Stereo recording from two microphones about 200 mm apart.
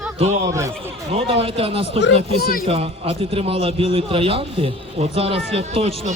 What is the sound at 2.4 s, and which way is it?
Speech, 45° left (ahead or behind).